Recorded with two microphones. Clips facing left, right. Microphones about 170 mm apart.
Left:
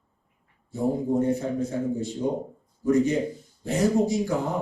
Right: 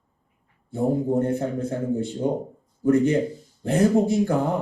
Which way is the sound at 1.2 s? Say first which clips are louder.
Even; 55° right (ahead or behind).